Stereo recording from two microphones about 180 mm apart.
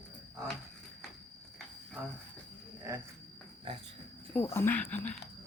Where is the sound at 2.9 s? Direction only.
15° right (ahead or behind).